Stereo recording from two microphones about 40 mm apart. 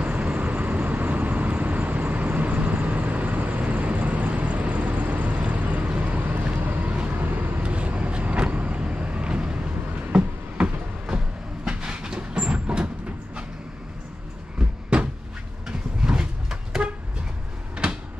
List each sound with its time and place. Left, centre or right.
0.0 s vehicle: right
10.1 s train: right
16.0 s vehicle: centre